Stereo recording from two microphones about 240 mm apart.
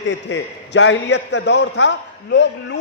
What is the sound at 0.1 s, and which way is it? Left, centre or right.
A man's voice, left.